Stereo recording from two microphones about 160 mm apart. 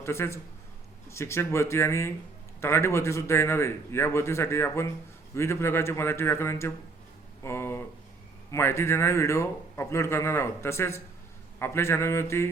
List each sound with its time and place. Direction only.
0.0 s a man's voice: 15° left (ahead or behind)
7.4 s a sound: 15° left (ahead or behind)
8.4 s a man's voice: 15° left (ahead or behind)